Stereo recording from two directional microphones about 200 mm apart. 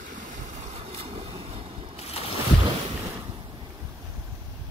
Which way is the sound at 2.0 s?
30° left (ahead or behind).